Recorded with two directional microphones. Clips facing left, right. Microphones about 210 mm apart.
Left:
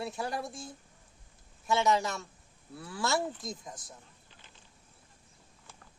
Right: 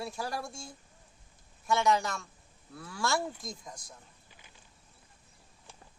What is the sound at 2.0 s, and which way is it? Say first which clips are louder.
Speech: left 2 dB; 25° left (ahead or behind).